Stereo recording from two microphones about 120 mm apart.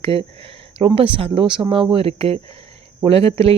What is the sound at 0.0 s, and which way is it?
Speech, 50° right (ahead or behind).